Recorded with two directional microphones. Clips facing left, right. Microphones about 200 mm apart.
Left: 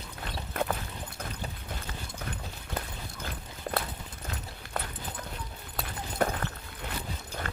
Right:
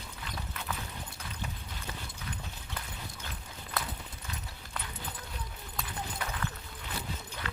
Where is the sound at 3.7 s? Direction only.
55° left (ahead or behind).